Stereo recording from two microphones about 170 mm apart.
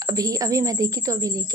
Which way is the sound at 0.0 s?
20° right (ahead or behind).